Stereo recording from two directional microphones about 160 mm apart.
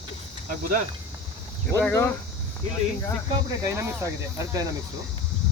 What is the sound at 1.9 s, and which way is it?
Speech, 15° left (ahead or behind).